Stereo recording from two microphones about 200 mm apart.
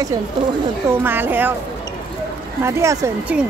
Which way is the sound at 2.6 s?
15° right (ahead or behind).